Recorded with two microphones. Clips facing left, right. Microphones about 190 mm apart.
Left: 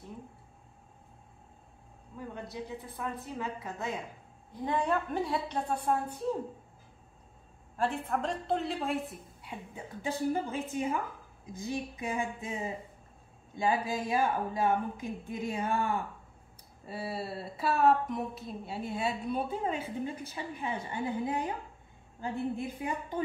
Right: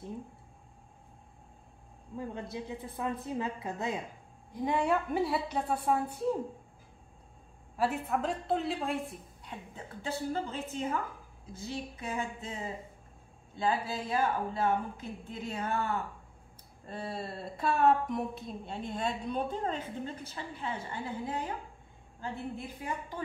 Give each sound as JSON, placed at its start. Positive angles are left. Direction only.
{"t": 2.5, "sound": "a woman's voice", "side_deg": -20}
{"t": 4.6, "sound": "a woman's voice", "side_deg": -10}
{"t": 7.7, "sound": "a woman's voice", "side_deg": -5}